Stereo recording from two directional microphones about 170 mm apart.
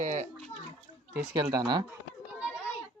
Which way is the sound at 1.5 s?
25° right (ahead or behind).